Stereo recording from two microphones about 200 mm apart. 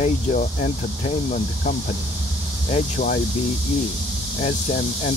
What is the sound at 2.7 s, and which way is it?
Speech, 35° left (ahead or behind).